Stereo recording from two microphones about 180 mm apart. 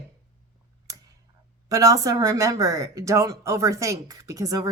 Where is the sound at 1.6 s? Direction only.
20° right (ahead or behind).